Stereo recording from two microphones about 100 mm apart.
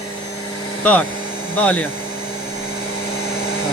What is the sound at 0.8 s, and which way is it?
Speech, 15° left (ahead or behind).